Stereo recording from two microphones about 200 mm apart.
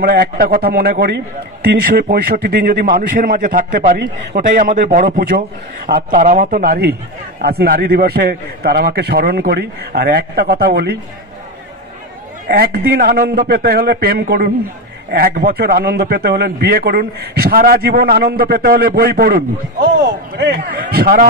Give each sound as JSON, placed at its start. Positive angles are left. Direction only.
{"t": 0.0, "sound": "a man's voice", "side_deg": -50}
{"t": 12.4, "sound": "a man's voice", "side_deg": -50}